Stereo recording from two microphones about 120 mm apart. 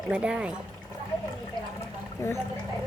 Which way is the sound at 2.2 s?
25° left (ahead or behind).